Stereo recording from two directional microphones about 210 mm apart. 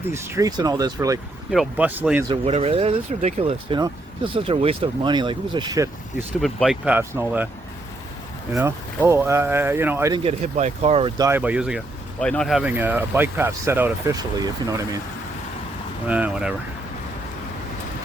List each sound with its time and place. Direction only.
0.1 s speech: 10° right (ahead or behind)
1.5 s speech: 5° right (ahead or behind)
2.3 s speech: 30° right (ahead or behind)
6.4 s speech: centre (ahead or behind)
8.5 s speech: 15° right (ahead or behind)
10.2 s speech: 30° right (ahead or behind)
11.2 s speech: 10° right (ahead or behind)
16.0 s speech: 5° right (ahead or behind)